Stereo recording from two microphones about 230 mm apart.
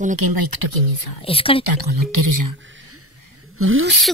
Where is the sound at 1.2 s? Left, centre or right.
Left.